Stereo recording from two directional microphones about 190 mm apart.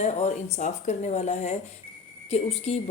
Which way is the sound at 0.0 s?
35° left (ahead or behind).